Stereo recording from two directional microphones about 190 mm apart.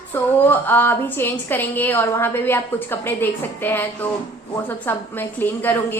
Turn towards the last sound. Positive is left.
turn(degrees=10)  # may be behind; listen again after turning